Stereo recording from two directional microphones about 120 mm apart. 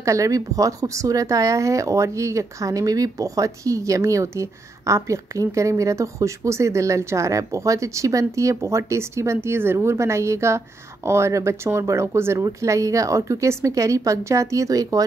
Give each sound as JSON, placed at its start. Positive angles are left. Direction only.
{"t": 0.0, "sound": "speech", "side_deg": -25}